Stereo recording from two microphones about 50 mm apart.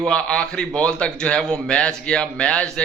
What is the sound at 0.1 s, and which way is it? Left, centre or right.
A man's voice, centre.